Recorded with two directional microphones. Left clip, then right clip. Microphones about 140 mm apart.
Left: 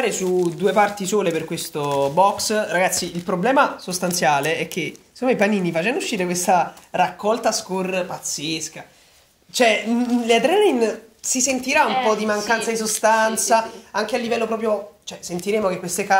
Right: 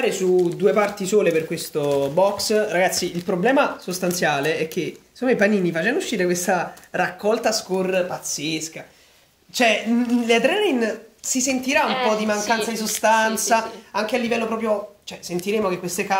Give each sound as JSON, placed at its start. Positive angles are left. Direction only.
{"t": 0.0, "sound": "speech", "side_deg": 35}
{"t": 9.5, "sound": "a woman's voice", "side_deg": 35}